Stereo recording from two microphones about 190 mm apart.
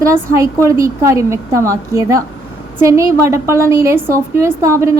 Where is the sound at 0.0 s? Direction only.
15° right (ahead or behind).